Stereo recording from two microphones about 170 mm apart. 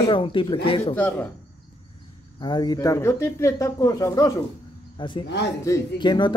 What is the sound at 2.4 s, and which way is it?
Speech, 25° left (ahead or behind).